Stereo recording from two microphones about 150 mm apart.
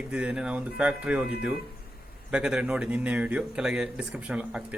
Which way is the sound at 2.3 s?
5° right (ahead or behind).